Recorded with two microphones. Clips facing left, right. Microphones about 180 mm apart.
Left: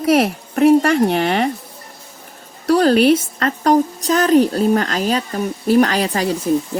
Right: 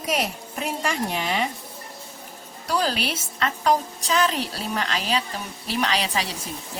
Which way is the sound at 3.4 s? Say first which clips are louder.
Left 8 dB; 40° left (ahead or behind).